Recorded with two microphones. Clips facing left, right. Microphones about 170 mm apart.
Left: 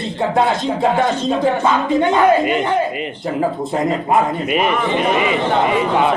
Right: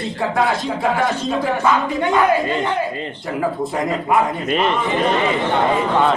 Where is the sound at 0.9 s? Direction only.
25° left (ahead or behind).